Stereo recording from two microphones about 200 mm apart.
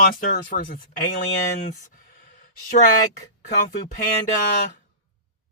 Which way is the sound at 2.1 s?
45° left (ahead or behind).